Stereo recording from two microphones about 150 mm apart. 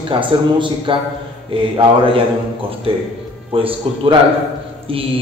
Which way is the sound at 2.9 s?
40° right (ahead or behind).